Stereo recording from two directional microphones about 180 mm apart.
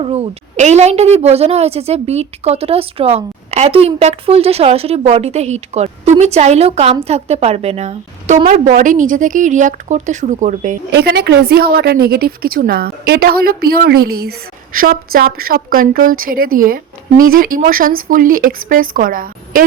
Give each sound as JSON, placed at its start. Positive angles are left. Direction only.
{"t": 0.0, "sound": "a woman's voice", "side_deg": -35}
{"t": 10.9, "sound": "a woman's voice", "side_deg": -65}